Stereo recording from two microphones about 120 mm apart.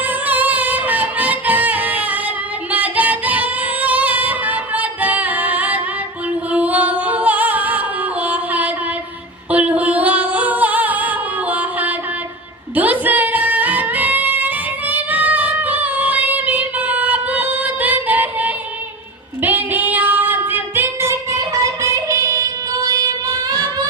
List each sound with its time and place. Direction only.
0.0 s music: 15° right (ahead or behind)
19.4 s female singing: 15° right (ahead or behind); by 23.8 s 35° right (ahead or behind)